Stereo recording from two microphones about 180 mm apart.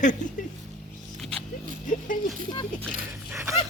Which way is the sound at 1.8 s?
45° left (ahead or behind).